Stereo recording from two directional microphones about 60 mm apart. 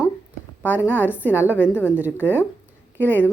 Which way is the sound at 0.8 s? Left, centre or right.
Left.